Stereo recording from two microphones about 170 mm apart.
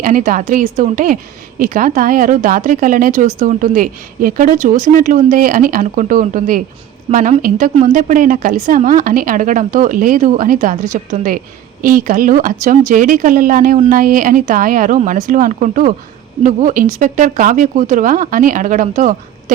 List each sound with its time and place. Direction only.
0.0 s a woman's voice: 55° right (ahead or behind)